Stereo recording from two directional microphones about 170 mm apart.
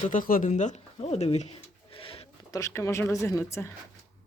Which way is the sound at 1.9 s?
35° left (ahead or behind).